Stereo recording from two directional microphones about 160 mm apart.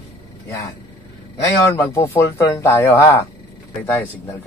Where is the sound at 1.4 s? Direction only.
20° left (ahead or behind).